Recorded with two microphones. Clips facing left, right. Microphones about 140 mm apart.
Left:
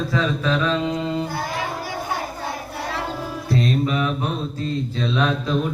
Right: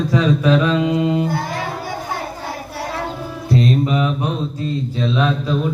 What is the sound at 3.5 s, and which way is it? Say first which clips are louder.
Mantra: right 4 dB; 20° right (ahead or behind).